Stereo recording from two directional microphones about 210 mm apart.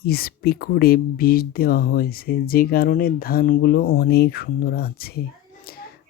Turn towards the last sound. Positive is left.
turn(degrees=45)  # may be behind; listen again after turning